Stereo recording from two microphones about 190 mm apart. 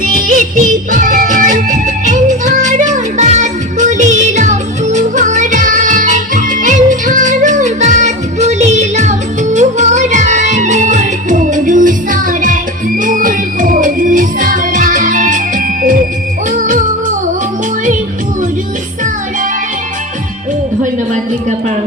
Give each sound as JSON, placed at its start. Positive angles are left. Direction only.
{"t": 0.0, "sound": "music", "side_deg": -45}